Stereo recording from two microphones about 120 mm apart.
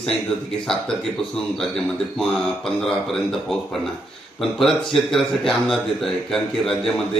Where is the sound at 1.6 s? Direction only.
5° left (ahead or behind).